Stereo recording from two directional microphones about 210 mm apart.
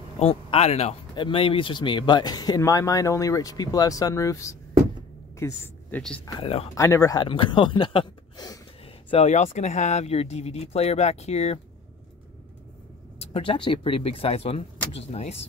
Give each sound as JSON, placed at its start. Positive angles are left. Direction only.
{"t": 0.2, "sound": "a woman's voice", "side_deg": 30}
{"t": 6.2, "sound": "speech", "side_deg": 25}
{"t": 6.7, "sound": "speech", "side_deg": 15}
{"t": 13.2, "sound": "speech", "side_deg": 25}